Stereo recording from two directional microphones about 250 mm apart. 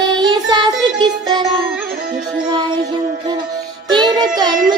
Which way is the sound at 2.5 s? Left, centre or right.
Centre.